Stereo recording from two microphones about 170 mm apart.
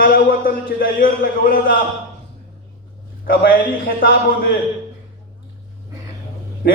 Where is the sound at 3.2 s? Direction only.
60° left (ahead or behind).